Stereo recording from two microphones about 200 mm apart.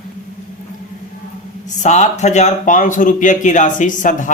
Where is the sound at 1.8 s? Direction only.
35° left (ahead or behind).